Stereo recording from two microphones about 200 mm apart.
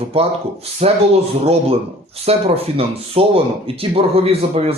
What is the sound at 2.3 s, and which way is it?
Speech, 30° right (ahead or behind).